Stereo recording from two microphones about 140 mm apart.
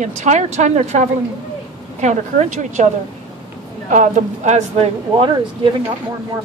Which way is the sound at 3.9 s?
60° right (ahead or behind).